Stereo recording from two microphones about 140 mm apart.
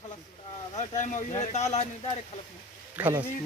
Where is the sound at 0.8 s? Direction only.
60° left (ahead or behind).